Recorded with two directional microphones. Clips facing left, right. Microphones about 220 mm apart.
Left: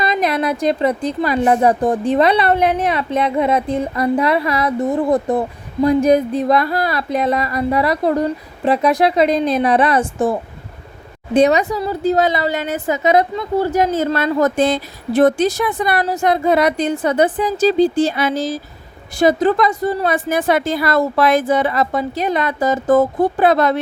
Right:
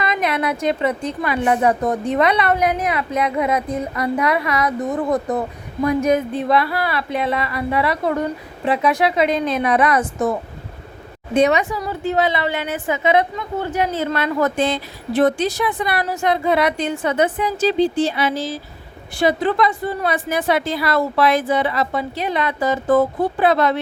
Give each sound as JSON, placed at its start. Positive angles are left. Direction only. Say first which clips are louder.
{"t": 0.0, "sound": "a woman's voice", "louder": "left 3 dB", "side_deg": 35}
{"t": 11.3, "sound": "a woman's voice", "louder": "left 3 dB", "side_deg": 35}